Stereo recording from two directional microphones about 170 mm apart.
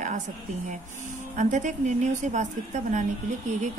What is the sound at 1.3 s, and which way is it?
Speech, 50° right (ahead or behind).